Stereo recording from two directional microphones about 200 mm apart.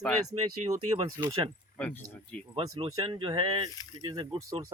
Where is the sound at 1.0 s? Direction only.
15° right (ahead or behind).